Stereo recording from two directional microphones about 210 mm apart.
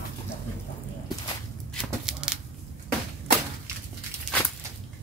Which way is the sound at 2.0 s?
5° right (ahead or behind).